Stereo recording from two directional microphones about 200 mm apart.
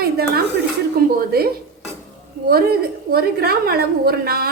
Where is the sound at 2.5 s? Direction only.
50° right (ahead or behind).